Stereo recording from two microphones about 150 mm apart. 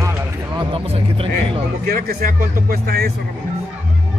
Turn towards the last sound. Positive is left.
turn(degrees=-90)